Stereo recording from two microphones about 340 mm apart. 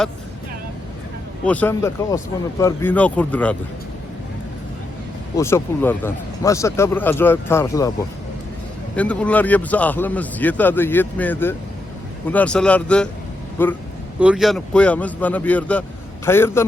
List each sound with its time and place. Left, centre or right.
1.5 s a man's voice: centre
5.4 s speech: centre
9.0 s a man's voice: centre